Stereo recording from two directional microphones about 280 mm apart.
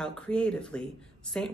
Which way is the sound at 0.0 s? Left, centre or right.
Centre.